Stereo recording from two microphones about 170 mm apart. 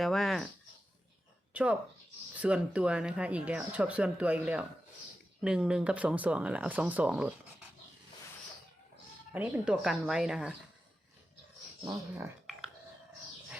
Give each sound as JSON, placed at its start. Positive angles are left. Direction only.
{"t": 0.0, "sound": "speech", "side_deg": 0}
{"t": 1.5, "sound": "speech", "side_deg": -10}
{"t": 9.3, "sound": "speech", "side_deg": -5}
{"t": 11.9, "sound": "speech", "side_deg": -15}